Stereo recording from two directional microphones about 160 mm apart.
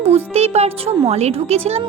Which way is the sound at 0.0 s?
40° right (ahead or behind).